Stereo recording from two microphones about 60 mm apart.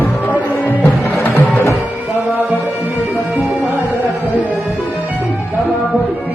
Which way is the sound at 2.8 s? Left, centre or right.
Right.